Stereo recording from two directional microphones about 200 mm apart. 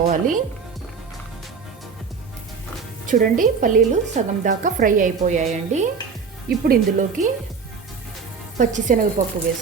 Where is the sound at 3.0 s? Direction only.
40° right (ahead or behind).